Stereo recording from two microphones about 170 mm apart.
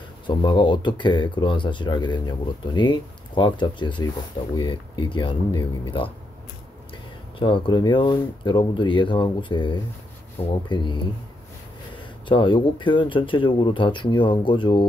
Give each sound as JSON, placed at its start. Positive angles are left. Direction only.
{"t": 0.3, "sound": "speech", "side_deg": 25}
{"t": 7.3, "sound": "speech", "side_deg": 30}
{"t": 12.3, "sound": "speech", "side_deg": 30}